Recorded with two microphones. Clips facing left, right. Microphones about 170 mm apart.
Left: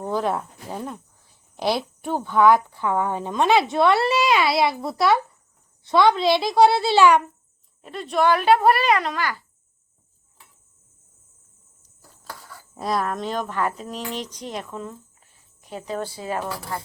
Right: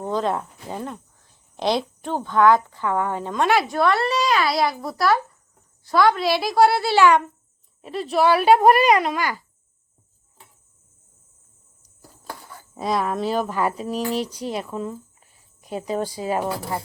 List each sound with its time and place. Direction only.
0.1 s speech: 5° left (ahead or behind); by 3.8 s 25° left (ahead or behind)
3.8 s a child's voice: 5° left (ahead or behind)
6.6 s a child's voice: 20° left (ahead or behind)
7.8 s speech: 5° right (ahead or behind)
12.7 s speech: centre (ahead or behind); by 16.8 s 20° right (ahead or behind)